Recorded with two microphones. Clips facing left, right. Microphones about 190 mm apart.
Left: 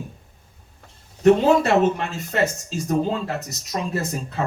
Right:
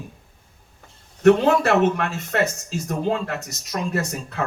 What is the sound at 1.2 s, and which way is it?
Speech, 65° right (ahead or behind).